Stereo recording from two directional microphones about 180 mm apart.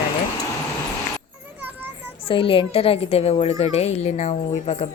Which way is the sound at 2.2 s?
30° left (ahead or behind).